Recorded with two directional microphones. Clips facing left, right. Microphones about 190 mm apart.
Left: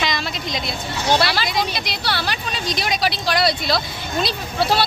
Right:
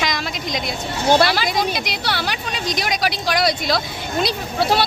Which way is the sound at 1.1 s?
50° right (ahead or behind).